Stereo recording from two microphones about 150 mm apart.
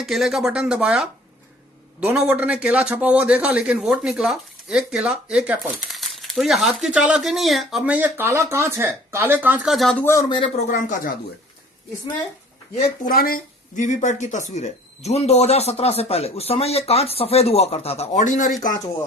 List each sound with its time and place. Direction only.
0.0 s a man's voice: centre (ahead or behind)
9.7 s speech: centre (ahead or behind)
10.0 s speech: 15° left (ahead or behind)
10.2 s speech: 35° left (ahead or behind)
10.7 s speech: 60° left (ahead or behind)
13.1 s speech: 75° left (ahead or behind); by 18.5 s 60° left (ahead or behind)